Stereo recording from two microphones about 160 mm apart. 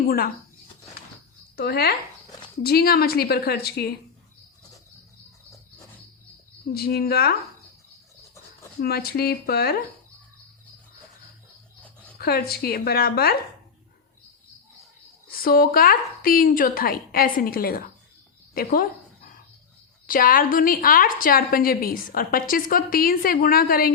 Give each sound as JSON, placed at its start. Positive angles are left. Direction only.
{"t": 1.5, "sound": "speech", "side_deg": 85}
{"t": 2.6, "sound": "a woman's voice", "side_deg": 75}
{"t": 6.7, "sound": "a woman's voice", "side_deg": 75}
{"t": 8.8, "sound": "a woman's voice", "side_deg": 75}
{"t": 12.2, "sound": "a woman's voice", "side_deg": 75}
{"t": 15.3, "sound": "a woman's voice", "side_deg": 70}
{"t": 18.5, "sound": "a sound", "side_deg": 65}
{"t": 20.1, "sound": "a woman's voice", "side_deg": 60}